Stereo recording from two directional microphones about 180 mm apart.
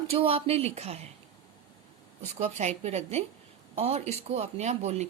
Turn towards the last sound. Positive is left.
turn(degrees=-40)  # may be behind; listen again after turning